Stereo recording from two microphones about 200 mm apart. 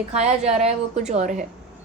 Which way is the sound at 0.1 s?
30° right (ahead or behind).